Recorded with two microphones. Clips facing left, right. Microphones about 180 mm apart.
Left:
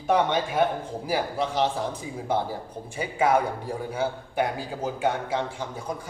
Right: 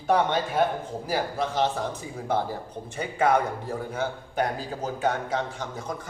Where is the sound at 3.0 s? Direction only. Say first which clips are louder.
Even; 10° left (ahead or behind).